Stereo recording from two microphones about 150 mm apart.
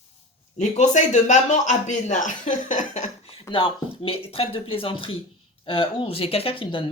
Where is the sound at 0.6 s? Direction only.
50° left (ahead or behind).